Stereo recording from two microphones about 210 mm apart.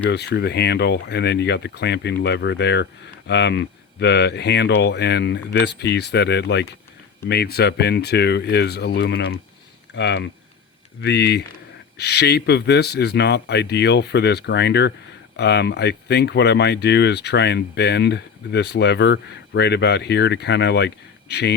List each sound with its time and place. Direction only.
0.1 s speech: 50° left (ahead or behind)